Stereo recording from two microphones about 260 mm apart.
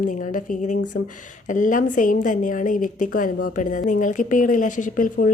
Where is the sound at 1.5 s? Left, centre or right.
Left.